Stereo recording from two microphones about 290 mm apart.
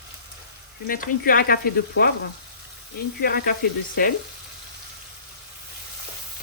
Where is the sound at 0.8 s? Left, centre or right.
Left.